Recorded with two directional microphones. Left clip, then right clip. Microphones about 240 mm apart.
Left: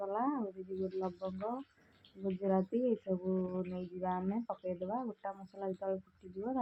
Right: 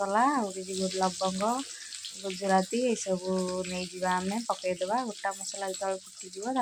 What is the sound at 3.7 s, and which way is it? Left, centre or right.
Speech, right.